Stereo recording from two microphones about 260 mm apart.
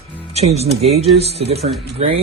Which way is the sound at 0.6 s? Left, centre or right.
Right.